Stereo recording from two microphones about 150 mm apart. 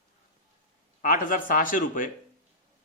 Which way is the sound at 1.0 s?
65° left (ahead or behind).